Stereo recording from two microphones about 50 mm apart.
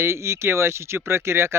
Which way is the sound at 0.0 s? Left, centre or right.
Right.